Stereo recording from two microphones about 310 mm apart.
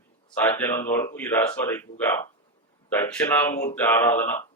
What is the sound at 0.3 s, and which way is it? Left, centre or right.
Speech, centre.